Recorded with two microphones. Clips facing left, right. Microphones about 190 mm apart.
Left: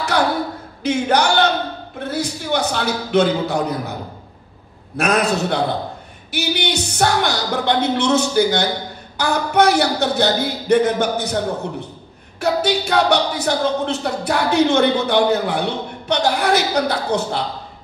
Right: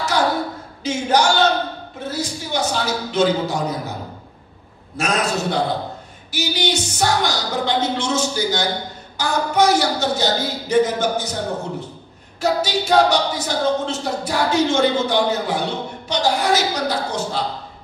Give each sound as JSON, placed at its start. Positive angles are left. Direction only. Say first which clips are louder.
{"t": 0.1, "sound": "a sound", "louder": "left 1 dB", "side_deg": 60}
{"t": 0.8, "sound": "a woman's voice", "louder": "left 1 dB", "side_deg": 60}
{"t": 4.9, "sound": "a woman's voice", "louder": "left 3 dB", "side_deg": 60}
{"t": 12.4, "sound": "a woman's voice", "louder": "left 2 dB", "side_deg": 60}